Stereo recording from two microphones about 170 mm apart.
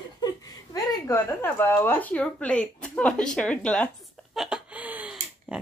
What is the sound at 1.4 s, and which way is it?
A woman's voice, 10° left (ahead or behind).